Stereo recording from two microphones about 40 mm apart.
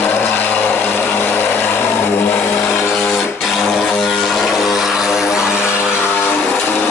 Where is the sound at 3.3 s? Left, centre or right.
Centre.